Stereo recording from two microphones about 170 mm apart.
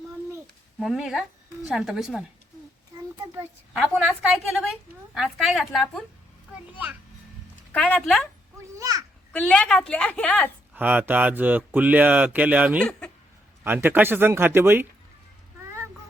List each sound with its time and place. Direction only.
0.8 s speech: centre (ahead or behind)
3.8 s a woman's voice: 5° right (ahead or behind)
7.7 s a woman's voice: 10° left (ahead or behind)
8.6 s children playing: 20° right (ahead or behind)
9.3 s a woman's voice: 5° left (ahead or behind)
10.8 s speech: 10° right (ahead or behind)